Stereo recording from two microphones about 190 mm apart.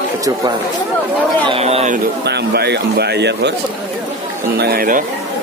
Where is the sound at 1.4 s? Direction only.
30° right (ahead or behind).